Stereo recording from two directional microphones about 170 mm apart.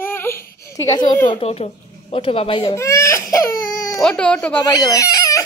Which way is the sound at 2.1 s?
35° left (ahead or behind).